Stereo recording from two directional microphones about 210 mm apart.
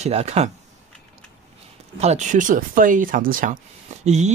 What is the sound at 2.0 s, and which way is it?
Speech, 35° right (ahead or behind).